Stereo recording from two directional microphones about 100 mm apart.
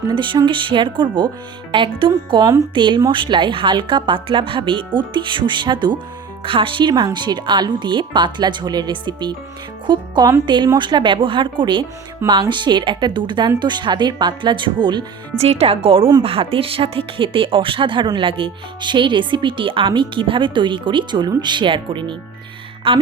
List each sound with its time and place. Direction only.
0.1 s speech: 55° right (ahead or behind)
15.4 s speech: 90° right; by 23.0 s 60° right (ahead or behind)